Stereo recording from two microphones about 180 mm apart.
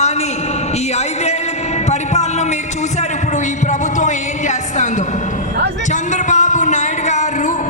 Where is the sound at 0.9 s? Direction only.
35° left (ahead or behind).